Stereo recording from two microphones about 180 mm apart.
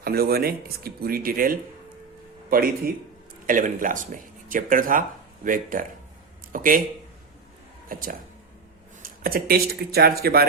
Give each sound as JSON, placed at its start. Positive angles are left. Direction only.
{"t": 0.0, "sound": "speech", "side_deg": -60}
{"t": 7.9, "sound": "speech", "side_deg": -50}